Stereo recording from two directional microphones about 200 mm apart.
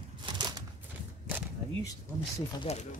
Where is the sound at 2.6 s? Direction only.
35° left (ahead or behind).